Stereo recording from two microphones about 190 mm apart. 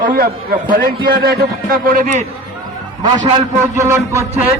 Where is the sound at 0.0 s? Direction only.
50° right (ahead or behind).